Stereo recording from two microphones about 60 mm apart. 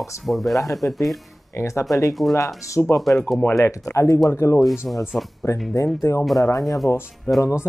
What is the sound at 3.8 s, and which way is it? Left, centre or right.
Speech, left.